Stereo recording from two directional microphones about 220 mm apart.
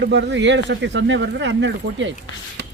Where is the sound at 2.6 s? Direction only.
50° right (ahead or behind).